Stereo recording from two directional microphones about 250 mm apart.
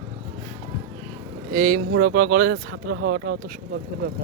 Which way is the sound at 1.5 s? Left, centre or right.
Right.